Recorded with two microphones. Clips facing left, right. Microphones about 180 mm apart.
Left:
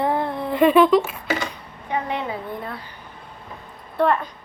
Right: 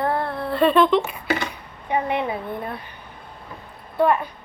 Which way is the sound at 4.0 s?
5° right (ahead or behind).